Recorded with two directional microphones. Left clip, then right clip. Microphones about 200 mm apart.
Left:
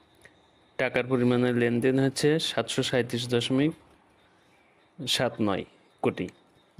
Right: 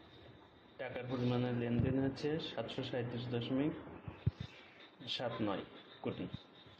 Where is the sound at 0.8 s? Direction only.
65° left (ahead or behind).